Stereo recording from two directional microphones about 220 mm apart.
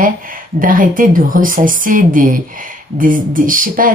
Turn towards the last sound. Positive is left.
turn(degrees=-40)  # may be behind; listen again after turning